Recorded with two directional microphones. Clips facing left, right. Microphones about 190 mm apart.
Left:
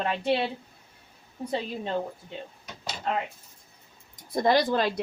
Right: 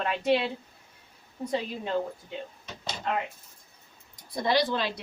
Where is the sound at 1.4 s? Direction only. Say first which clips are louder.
Even; 30° left (ahead or behind).